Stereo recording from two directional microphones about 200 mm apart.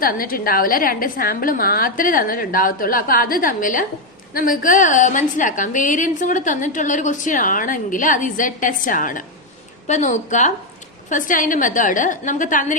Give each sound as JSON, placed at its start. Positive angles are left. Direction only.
{"t": 0.0, "sound": "a woman's voice", "side_deg": 45}